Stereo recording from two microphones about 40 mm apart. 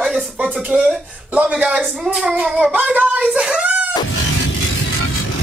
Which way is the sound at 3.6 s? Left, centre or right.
Right.